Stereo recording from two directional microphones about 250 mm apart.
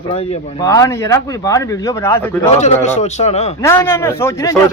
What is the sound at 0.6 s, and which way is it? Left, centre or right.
Speech, centre.